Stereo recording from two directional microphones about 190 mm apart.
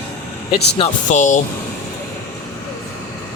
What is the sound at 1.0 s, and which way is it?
Speech, 40° left (ahead or behind).